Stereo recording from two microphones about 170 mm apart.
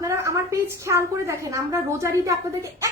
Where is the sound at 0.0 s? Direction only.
20° right (ahead or behind).